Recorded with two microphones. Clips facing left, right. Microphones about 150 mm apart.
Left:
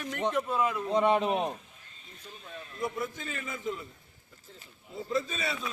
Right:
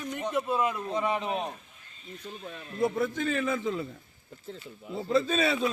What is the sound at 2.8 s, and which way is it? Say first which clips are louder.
A man's voice: right 7 dB; 75° right (ahead or behind).